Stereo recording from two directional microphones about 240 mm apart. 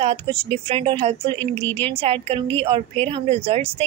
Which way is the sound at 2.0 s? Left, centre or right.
Right.